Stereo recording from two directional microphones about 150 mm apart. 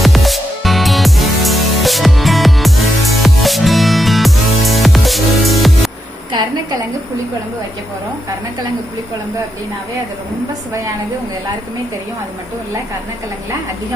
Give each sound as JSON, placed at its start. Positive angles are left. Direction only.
{"t": 0.0, "sound": "music", "side_deg": 0}